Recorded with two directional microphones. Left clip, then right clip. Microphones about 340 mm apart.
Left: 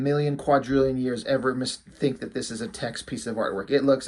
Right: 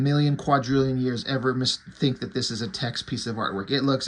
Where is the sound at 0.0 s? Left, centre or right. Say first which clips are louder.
Left 1 dB; centre.